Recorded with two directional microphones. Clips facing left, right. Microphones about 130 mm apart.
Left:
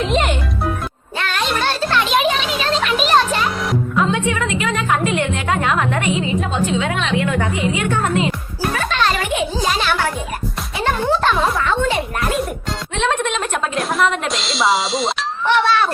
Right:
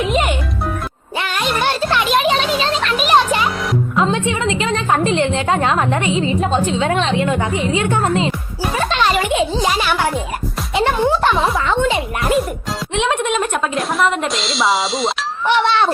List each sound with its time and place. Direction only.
0.0 s music: 5° right (ahead or behind)
2.8 s music: centre (ahead or behind)
3.1 s music: 10° right (ahead or behind)
3.9 s a woman's voice: 25° right (ahead or behind)
8.8 s music: 20° right (ahead or behind)
9.3 s a sound: 25° right (ahead or behind)
9.6 s music: 10° right (ahead or behind)
12.9 s a woman's voice: 15° right (ahead or behind)
15.4 s speech: 20° right (ahead or behind)